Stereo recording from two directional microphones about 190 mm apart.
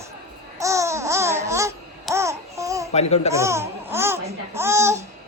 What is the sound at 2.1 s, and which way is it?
Babbling, 15° right (ahead or behind).